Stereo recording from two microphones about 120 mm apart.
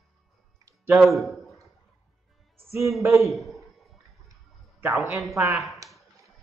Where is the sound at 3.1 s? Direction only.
Centre (ahead or behind).